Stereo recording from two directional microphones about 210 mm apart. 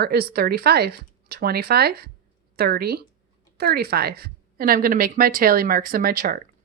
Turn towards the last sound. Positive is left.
turn(degrees=-40)  # may be behind; listen again after turning